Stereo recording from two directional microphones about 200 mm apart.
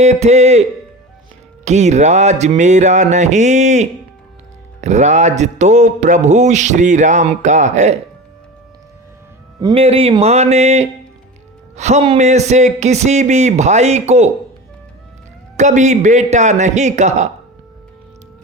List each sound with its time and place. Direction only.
0.0 s speech: 35° right (ahead or behind)
1.6 s speech: 35° right (ahead or behind)
9.6 s speech: 20° right (ahead or behind)
9.8 s speech: 30° right (ahead or behind)
15.5 s speech: 35° right (ahead or behind)